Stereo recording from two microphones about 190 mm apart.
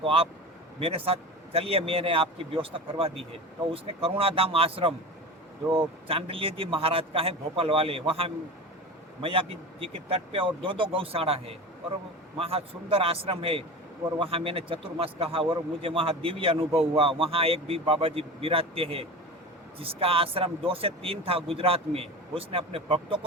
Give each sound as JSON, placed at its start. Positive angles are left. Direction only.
{"t": 0.0, "sound": "a man's voice", "side_deg": -30}